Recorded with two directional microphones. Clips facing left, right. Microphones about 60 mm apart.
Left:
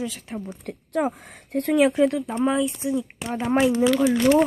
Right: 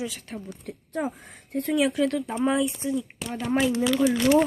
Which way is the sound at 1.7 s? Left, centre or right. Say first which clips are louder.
Left 5 dB; left.